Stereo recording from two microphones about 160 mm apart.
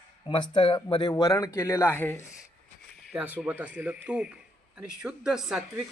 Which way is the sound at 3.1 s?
10° right (ahead or behind).